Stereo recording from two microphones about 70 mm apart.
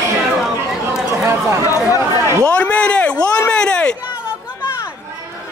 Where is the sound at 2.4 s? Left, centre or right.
Centre.